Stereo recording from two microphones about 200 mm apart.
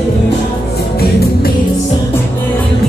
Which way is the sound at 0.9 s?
50° left (ahead or behind).